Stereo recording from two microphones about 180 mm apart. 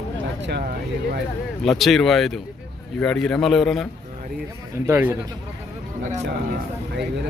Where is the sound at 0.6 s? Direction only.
55° right (ahead or behind).